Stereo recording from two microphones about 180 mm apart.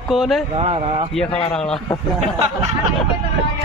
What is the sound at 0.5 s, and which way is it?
Speech, 30° right (ahead or behind).